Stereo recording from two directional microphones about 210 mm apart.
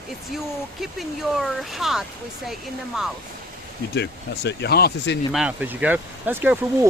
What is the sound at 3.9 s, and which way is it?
Speech, 55° left (ahead or behind).